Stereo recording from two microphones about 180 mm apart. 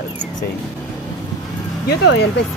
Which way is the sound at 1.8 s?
65° left (ahead or behind).